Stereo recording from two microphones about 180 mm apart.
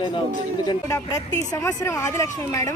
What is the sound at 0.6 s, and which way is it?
Speech, 20° left (ahead or behind).